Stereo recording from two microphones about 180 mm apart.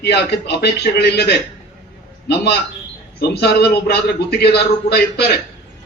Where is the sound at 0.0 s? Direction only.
65° left (ahead or behind).